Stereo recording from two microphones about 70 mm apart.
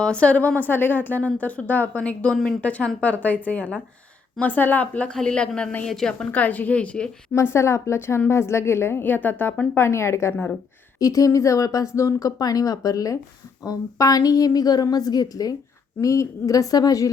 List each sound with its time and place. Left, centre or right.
0.0 s a woman's voice: centre
2.6 s a woman's voice: centre
6.3 s a woman's voice: left
7.3 s a woman's voice: left
11.0 s a woman's voice: left
16.0 s a woman's voice: left